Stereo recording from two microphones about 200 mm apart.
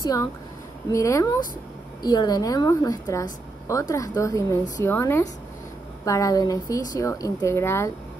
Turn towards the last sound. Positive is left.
turn(degrees=10)  # may be behind; listen again after turning